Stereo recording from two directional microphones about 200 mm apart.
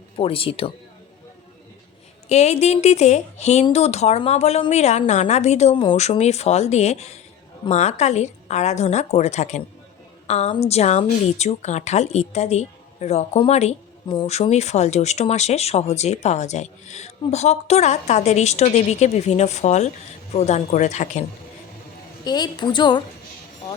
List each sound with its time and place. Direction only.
0.2 s a woman's voice: 25° left (ahead or behind)
2.3 s a woman's voice: 35° left (ahead or behind)
22.2 s a woman's voice: 20° left (ahead or behind)